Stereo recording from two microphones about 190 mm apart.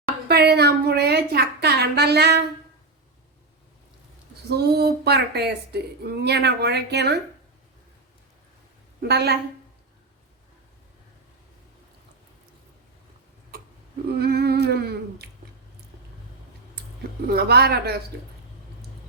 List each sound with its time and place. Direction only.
0.3 s a sound: 60° right (ahead or behind)
4.4 s speech: 60° right (ahead or behind)
9.0 s a woman's voice: 60° right (ahead or behind)
14.1 s speech: 55° right (ahead or behind)
17.3 s speech: 55° right (ahead or behind)